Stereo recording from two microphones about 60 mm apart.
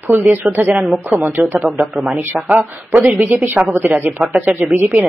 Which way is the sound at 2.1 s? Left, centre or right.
Right.